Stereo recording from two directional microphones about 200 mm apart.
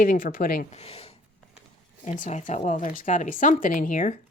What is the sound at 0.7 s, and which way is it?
A woman's voice, 30° left (ahead or behind).